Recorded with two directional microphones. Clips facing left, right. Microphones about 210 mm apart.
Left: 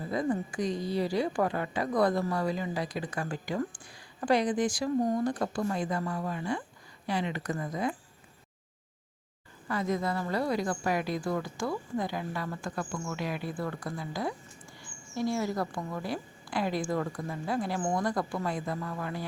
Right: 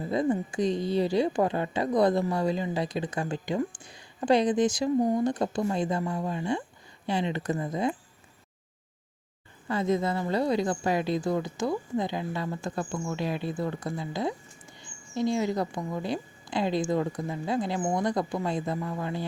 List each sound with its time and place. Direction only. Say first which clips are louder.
0.0 s a woman's voice: right 4 dB; 25° right (ahead or behind)
9.6 s a woman's voice: right 4 dB; 25° right (ahead or behind)